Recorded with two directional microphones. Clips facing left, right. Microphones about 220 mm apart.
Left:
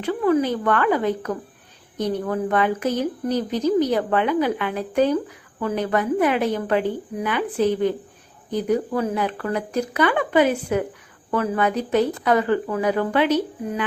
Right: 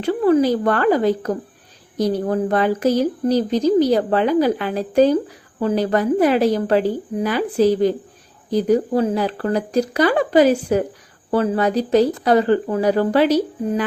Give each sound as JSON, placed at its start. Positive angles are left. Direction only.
{"t": 0.0, "sound": "speech", "side_deg": -35}